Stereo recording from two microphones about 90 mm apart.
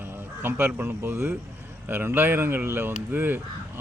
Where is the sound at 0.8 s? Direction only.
25° right (ahead or behind).